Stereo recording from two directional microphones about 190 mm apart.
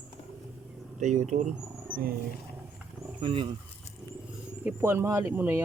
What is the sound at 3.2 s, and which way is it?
Speech, 25° right (ahead or behind).